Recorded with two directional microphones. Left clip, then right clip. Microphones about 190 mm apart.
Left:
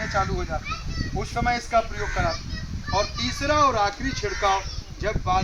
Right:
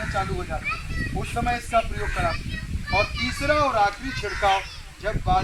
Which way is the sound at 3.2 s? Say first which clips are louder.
Left 1 dB; 45° right (ahead or behind).